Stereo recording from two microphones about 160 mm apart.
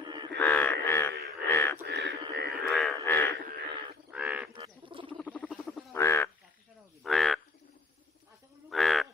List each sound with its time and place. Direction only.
0.0 s a sound: 25° right (ahead or behind)
0.4 s a sound: 10° left (ahead or behind)
1.9 s livestock: 90° right
2.7 s frog: centre (ahead or behind)
3.3 s crow: 80° right
4.1 s bird: 5° right (ahead or behind)
4.6 s bird: 30° right (ahead or behind)
5.2 s rodents: 5° left (ahead or behind)
5.9 s frog: 15° left (ahead or behind)
7.0 s bird: centre (ahead or behind)
8.6 s a sound: centre (ahead or behind)